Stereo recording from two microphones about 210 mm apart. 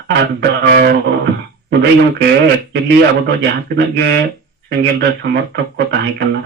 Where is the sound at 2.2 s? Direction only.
50° right (ahead or behind).